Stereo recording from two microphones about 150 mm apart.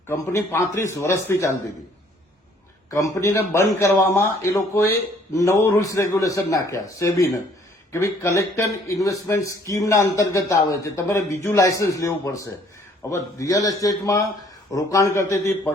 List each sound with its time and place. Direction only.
0.1 s speech: 15° left (ahead or behind)
2.9 s speech: 20° left (ahead or behind)